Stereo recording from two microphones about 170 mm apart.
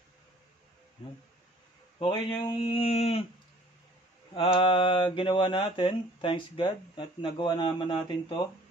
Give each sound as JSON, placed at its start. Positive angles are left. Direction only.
{"t": 1.0, "sound": "a man's voice", "side_deg": 30}
{"t": 4.3, "sound": "mantra", "side_deg": 30}